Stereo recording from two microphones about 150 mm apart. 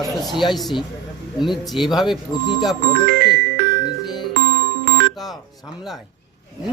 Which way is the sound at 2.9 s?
90° right.